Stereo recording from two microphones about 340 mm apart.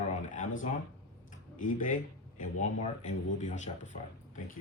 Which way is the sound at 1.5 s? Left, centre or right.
Left.